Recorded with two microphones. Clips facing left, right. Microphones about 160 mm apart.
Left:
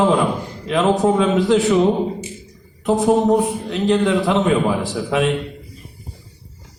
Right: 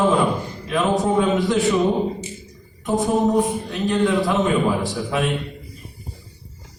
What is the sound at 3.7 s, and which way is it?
Speech, 75° left (ahead or behind).